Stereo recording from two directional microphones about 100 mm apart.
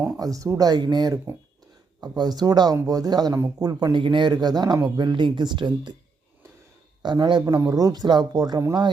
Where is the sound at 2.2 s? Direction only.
45° right (ahead or behind).